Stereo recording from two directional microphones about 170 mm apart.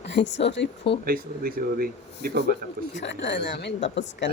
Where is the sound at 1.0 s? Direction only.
60° right (ahead or behind).